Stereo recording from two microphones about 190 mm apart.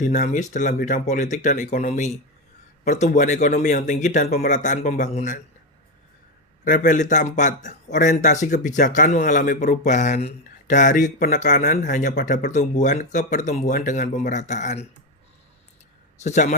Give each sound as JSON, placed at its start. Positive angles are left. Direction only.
{"t": 0.0, "sound": "speech", "side_deg": 45}
{"t": 6.7, "sound": "speech", "side_deg": 45}
{"t": 16.2, "sound": "speech", "side_deg": 40}